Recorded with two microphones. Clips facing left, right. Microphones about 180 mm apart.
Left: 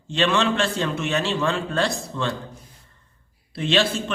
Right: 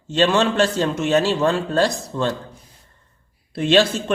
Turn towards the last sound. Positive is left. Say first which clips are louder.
# right 5 dB
turn(degrees=-45)  # may be behind; listen again after turning